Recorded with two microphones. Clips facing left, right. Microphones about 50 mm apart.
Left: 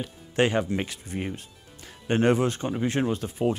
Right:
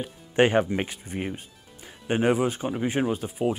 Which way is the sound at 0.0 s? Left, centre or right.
Right.